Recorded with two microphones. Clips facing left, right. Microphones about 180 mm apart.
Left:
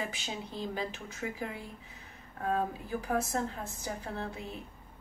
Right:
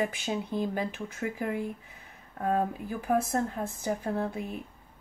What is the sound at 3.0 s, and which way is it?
Speech, 55° right (ahead or behind).